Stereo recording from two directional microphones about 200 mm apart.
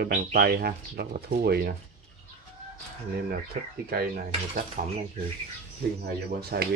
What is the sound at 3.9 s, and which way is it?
Speech, 50° right (ahead or behind).